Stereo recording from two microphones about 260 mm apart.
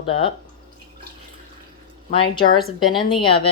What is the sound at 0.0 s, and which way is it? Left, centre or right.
Speech, centre.